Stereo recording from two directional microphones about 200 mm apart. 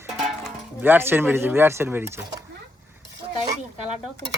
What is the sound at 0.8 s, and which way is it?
Speech, 10° right (ahead or behind).